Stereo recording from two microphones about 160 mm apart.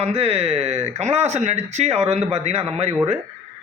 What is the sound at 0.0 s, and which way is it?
Speech, 40° right (ahead or behind).